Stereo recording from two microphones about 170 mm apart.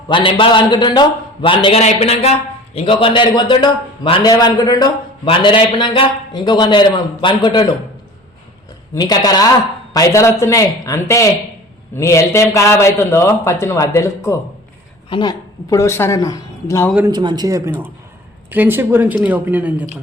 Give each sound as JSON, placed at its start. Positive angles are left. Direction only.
{"t": 0.1, "sound": "a man's voice", "side_deg": 30}
{"t": 9.0, "sound": "a man's voice", "side_deg": 25}
{"t": 17.1, "sound": "speech", "side_deg": -25}